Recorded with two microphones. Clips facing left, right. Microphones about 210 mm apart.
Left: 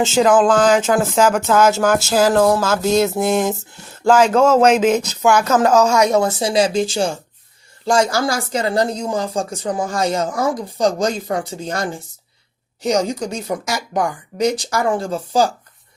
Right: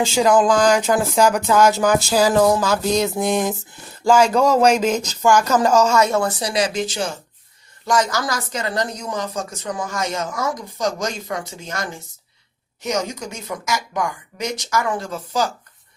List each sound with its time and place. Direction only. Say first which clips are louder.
0.1 s speech: left 2 dB; centre (ahead or behind)
4.8 s speech: left 4 dB; 5° left (ahead or behind); by 15.4 s 30° left (ahead or behind)